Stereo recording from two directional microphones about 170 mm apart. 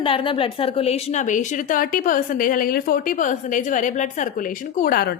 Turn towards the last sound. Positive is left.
turn(degrees=60)  # may be behind; listen again after turning